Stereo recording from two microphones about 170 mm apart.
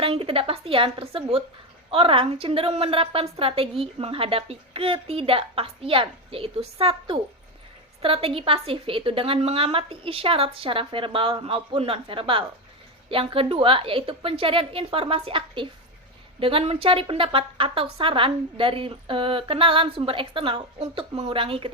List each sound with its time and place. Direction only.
0.0 s a woman's voice: 35° right (ahead or behind)